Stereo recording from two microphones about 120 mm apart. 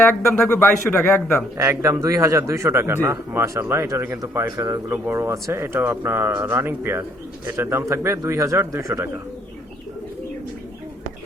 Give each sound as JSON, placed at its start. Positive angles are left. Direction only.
{"t": 0.0, "sound": "speech", "side_deg": 15}
{"t": 1.5, "sound": "speech", "side_deg": -25}